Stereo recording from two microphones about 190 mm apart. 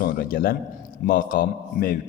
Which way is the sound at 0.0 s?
50° left (ahead or behind).